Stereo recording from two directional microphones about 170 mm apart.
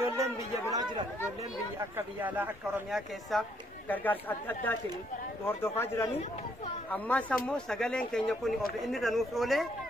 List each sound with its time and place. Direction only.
0.0 s speech: 20° right (ahead or behind)
2.0 s speech: 10° right (ahead or behind)
3.3 s speech: centre (ahead or behind)